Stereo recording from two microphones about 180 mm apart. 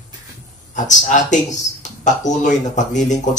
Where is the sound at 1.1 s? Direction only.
40° left (ahead or behind).